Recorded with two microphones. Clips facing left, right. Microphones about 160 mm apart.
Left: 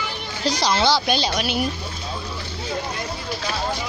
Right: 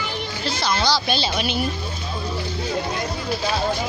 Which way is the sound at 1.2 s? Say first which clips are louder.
Left 1 dB; 10° left (ahead or behind).